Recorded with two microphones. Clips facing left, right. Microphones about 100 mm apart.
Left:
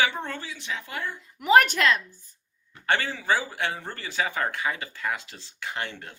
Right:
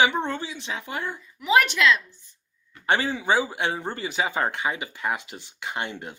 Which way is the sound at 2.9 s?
20° right (ahead or behind).